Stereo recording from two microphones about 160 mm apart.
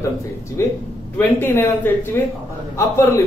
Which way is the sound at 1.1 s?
10° left (ahead or behind).